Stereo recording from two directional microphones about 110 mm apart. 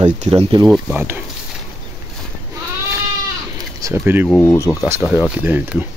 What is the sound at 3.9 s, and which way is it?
Speech, 20° right (ahead or behind).